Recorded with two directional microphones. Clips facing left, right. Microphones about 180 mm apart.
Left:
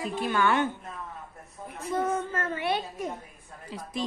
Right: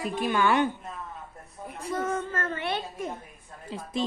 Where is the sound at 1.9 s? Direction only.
15° left (ahead or behind).